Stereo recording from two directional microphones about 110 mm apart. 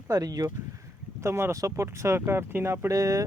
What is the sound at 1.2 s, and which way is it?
Speech, 25° right (ahead or behind).